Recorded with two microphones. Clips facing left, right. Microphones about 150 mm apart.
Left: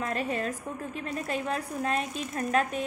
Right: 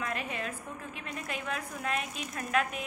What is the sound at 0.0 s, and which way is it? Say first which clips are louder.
A woman's voice: left 5 dB; 35° left (ahead or behind).